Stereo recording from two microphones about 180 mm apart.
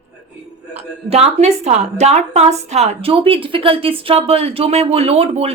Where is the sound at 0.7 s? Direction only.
35° right (ahead or behind).